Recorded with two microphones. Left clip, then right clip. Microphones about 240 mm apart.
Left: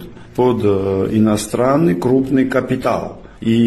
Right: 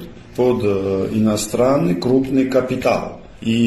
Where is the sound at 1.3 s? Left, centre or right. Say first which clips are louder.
Right 2 dB; left.